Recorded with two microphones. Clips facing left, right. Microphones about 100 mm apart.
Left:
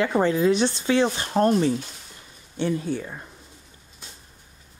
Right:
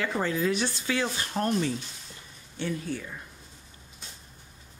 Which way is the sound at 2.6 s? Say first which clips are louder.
Left 7 dB; 25° left (ahead or behind).